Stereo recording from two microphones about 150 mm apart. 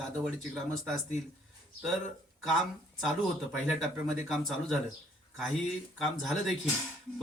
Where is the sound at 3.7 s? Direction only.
Centre (ahead or behind).